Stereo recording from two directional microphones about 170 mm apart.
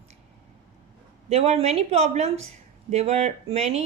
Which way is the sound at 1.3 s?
35° right (ahead or behind).